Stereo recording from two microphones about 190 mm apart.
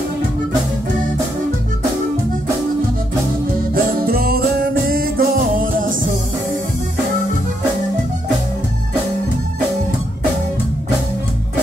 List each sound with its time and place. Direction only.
3.7 s music: 50° right (ahead or behind)